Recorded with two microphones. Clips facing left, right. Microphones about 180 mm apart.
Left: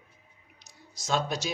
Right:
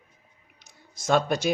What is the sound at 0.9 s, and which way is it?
Speech, 55° right (ahead or behind).